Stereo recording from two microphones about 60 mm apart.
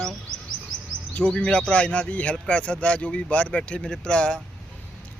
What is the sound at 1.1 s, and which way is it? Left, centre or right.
Speech, centre.